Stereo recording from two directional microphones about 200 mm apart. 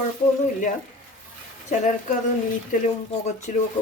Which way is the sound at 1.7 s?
40° left (ahead or behind).